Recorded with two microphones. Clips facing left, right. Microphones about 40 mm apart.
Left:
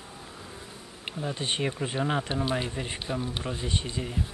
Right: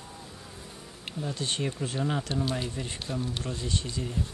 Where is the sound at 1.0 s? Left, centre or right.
Left.